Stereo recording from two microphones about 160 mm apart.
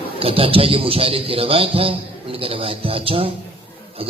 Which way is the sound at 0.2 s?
35° right (ahead or behind).